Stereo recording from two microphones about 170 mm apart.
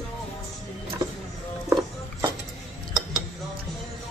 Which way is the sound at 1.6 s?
25° right (ahead or behind).